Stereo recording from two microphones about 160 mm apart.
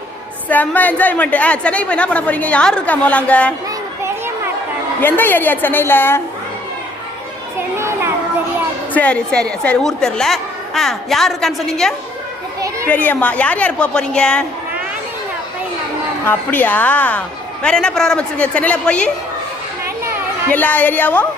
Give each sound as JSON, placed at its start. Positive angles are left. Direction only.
{"t": 0.4, "sound": "a woman's voice", "side_deg": 10}
{"t": 4.9, "sound": "a woman's voice", "side_deg": 10}
{"t": 7.8, "sound": "a child's voice", "side_deg": -15}
{"t": 8.9, "sound": "a woman's voice", "side_deg": 10}
{"t": 12.5, "sound": "children playing", "side_deg": -20}
{"t": 12.9, "sound": "a woman's voice", "side_deg": 10}
{"t": 16.2, "sound": "a woman's voice", "side_deg": 10}
{"t": 20.5, "sound": "a woman's voice", "side_deg": 10}